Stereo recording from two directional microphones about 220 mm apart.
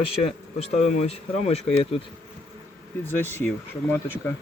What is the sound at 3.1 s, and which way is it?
Speech, 10° left (ahead or behind).